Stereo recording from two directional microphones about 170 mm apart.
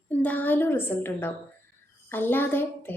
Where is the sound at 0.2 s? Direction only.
10° left (ahead or behind).